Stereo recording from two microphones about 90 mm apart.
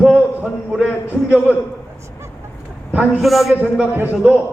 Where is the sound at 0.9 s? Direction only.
25° left (ahead or behind).